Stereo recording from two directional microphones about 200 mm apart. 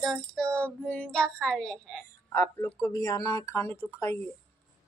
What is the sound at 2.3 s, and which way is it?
Speech, 15° left (ahead or behind).